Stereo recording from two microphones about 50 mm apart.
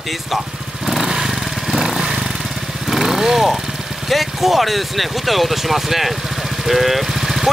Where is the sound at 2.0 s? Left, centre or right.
Centre.